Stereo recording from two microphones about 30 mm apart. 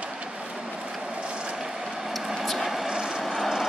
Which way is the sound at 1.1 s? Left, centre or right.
Right.